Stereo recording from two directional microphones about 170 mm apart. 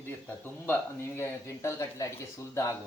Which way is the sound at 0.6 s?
15° left (ahead or behind).